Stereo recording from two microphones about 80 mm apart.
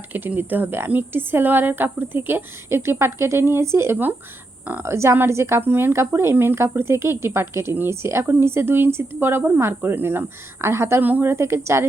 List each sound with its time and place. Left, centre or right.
0.1 s speech: right